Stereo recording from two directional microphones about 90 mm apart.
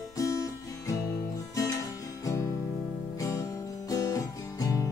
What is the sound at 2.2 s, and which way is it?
Music, 35° left (ahead or behind).